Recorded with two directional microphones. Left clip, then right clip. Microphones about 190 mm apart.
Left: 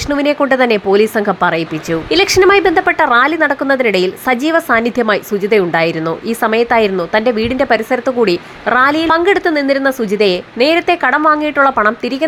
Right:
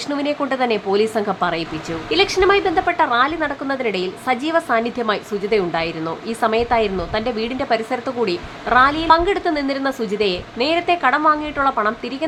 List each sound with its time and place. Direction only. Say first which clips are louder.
0.1 s a woman's voice: left 9 dB; 25° left (ahead or behind)
2.0 s a woman's voice: left 6 dB; 30° left (ahead or behind)